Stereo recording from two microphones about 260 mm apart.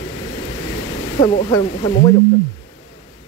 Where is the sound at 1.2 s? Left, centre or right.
Centre.